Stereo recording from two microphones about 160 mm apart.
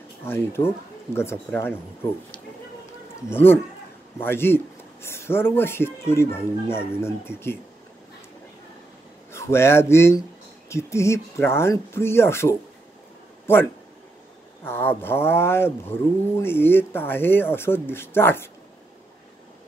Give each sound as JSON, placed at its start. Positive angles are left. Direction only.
{"t": 0.2, "sound": "speech", "side_deg": 15}
{"t": 3.3, "sound": "speech", "side_deg": 15}
{"t": 9.3, "sound": "speech", "side_deg": 15}
{"t": 14.6, "sound": "speech", "side_deg": 15}